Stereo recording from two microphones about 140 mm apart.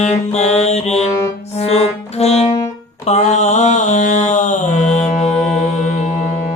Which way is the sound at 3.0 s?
55° left (ahead or behind).